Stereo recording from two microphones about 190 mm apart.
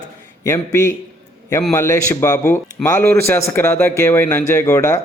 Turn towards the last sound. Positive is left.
turn(degrees=15)  # may be behind; listen again after turning